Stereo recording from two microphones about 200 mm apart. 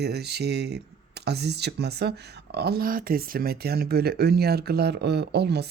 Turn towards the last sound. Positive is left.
turn(degrees=-55)  # may be behind; listen again after turning